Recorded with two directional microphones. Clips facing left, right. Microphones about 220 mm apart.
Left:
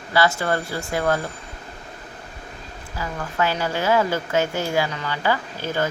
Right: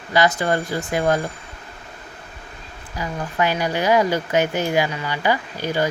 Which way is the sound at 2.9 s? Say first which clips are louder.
Right 2 dB; 15° right (ahead or behind).